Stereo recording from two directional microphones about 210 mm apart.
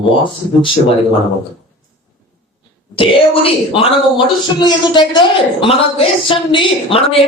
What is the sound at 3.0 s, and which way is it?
A woman's voice, 25° left (ahead or behind).